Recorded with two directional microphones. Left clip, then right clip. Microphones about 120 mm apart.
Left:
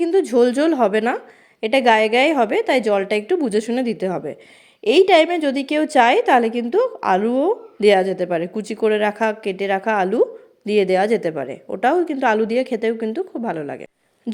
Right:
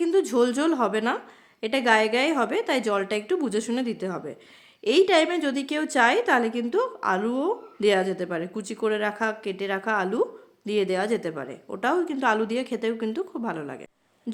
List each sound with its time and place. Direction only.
0.0 s a woman's voice: 15° left (ahead or behind)